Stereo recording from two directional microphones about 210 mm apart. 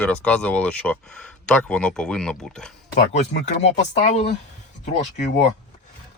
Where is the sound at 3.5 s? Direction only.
30° left (ahead or behind).